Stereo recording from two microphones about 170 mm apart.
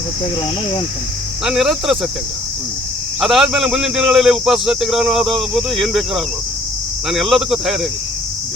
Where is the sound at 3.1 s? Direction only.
Centre (ahead or behind).